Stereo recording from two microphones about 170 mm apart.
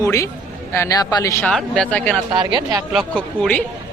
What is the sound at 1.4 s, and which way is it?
Speech, 5° left (ahead or behind).